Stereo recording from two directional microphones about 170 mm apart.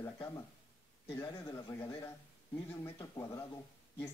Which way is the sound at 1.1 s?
15° left (ahead or behind).